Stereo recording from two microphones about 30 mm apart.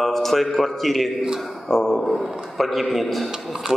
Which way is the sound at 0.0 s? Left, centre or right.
Centre.